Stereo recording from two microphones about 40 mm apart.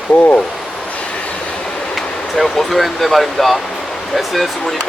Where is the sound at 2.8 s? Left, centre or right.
Centre.